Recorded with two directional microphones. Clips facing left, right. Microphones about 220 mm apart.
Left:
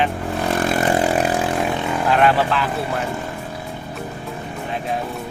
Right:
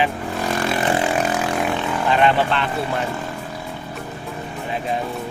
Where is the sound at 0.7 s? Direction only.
40° left (ahead or behind).